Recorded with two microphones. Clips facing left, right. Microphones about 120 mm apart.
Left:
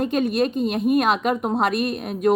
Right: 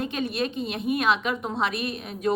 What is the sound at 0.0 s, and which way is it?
Speech, 50° left (ahead or behind).